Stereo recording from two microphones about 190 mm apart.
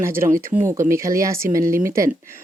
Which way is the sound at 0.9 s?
15° right (ahead or behind).